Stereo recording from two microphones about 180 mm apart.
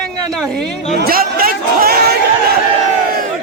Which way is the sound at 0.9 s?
55° right (ahead or behind).